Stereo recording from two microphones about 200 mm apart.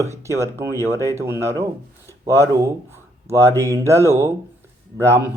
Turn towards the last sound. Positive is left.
turn(degrees=-15)  # may be behind; listen again after turning